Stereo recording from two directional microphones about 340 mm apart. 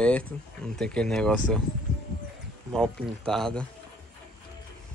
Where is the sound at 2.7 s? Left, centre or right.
Centre.